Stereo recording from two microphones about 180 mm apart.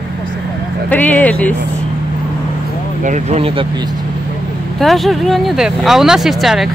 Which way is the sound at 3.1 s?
40° right (ahead or behind).